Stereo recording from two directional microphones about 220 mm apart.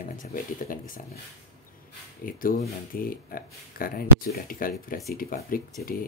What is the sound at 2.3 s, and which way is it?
Speech, 40° left (ahead or behind).